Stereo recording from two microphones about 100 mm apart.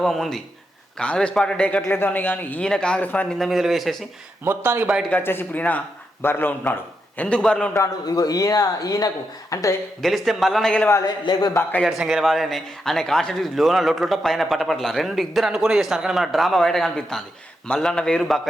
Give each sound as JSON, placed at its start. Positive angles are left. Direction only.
{"t": 0.0, "sound": "a man's voice", "side_deg": 5}
{"t": 3.3, "sound": "a man's voice", "side_deg": 0}
{"t": 4.4, "sound": "speech", "side_deg": -20}
{"t": 5.0, "sound": "a man's voice", "side_deg": 20}
{"t": 7.2, "sound": "speech", "side_deg": 10}
{"t": 8.0, "sound": "speech", "side_deg": 40}
{"t": 10.0, "sound": "a man's voice", "side_deg": 0}
{"t": 11.0, "sound": "speech", "side_deg": 45}
{"t": 11.8, "sound": "a man's voice", "side_deg": 0}